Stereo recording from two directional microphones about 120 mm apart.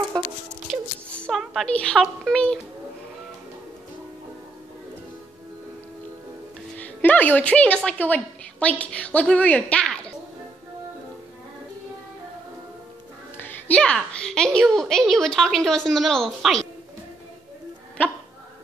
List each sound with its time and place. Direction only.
1.3 s a woman's voice: centre (ahead or behind)
6.8 s a woman's voice: 15° left (ahead or behind)
13.4 s a woman's voice: 10° left (ahead or behind)
18.0 s speech: 15° left (ahead or behind)